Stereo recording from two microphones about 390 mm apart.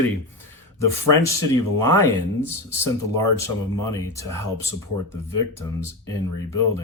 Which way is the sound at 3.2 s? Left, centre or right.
Left.